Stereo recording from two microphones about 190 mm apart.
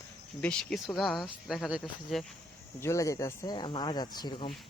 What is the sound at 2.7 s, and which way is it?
Speech, 15° left (ahead or behind).